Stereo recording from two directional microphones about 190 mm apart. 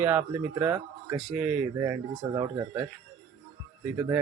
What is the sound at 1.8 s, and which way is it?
A man's voice, 15° right (ahead or behind).